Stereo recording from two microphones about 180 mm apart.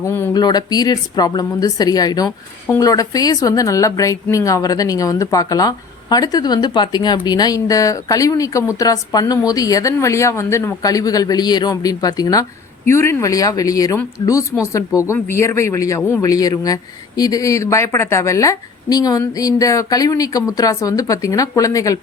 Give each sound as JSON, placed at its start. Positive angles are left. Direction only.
{"t": 0.0, "sound": "a woman's voice", "side_deg": 15}